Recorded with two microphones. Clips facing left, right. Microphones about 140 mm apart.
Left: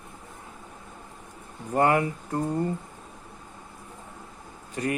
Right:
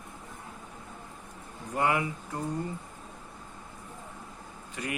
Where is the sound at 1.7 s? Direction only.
45° left (ahead or behind).